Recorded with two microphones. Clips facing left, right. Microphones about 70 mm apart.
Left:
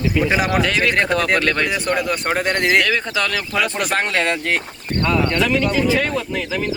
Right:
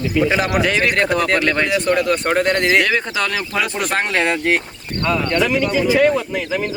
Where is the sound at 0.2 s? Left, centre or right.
Centre.